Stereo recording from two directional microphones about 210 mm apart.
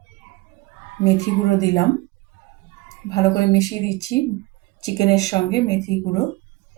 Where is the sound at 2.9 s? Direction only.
15° left (ahead or behind).